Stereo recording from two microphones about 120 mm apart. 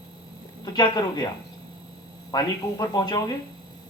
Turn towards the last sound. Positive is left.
turn(degrees=35)  # may be behind; listen again after turning